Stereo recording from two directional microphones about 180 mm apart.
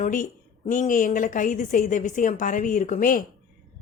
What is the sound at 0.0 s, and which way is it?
A woman's voice, 45° left (ahead or behind).